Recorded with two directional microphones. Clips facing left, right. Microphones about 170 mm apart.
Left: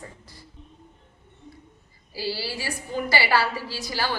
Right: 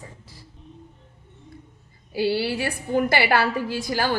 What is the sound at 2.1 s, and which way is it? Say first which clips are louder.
A woman's voice: right 8 dB; 60° right (ahead or behind).